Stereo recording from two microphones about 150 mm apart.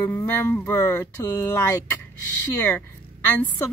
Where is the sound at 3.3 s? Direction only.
10° left (ahead or behind).